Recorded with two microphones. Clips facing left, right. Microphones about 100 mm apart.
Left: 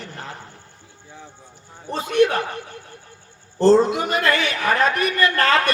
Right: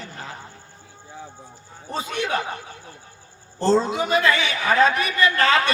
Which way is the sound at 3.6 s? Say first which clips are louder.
Left 5 dB; 55° left (ahead or behind).